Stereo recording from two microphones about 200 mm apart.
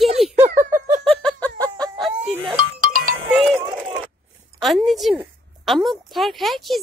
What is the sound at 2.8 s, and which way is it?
Music, 45° right (ahead or behind).